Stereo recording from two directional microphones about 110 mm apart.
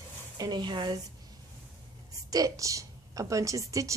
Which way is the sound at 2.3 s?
30° right (ahead or behind).